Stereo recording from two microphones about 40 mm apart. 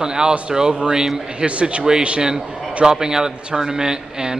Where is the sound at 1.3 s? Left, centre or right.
Right.